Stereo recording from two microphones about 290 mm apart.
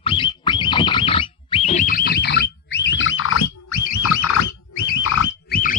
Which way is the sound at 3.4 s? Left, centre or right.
Left.